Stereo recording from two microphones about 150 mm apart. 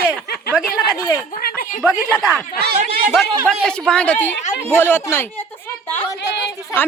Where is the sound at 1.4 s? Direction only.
85° left.